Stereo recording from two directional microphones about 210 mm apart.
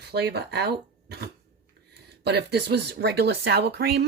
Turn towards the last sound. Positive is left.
turn(degrees=-50)  # may be behind; listen again after turning